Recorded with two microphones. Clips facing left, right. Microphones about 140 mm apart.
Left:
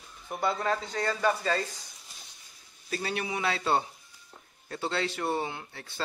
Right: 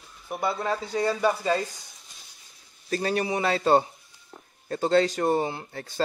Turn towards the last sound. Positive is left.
turn(degrees=-40)  # may be behind; listen again after turning